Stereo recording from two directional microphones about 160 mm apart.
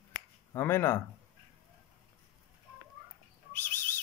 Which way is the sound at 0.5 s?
15° left (ahead or behind).